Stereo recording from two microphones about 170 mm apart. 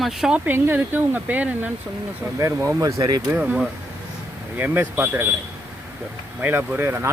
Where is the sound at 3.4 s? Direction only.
Centre (ahead or behind).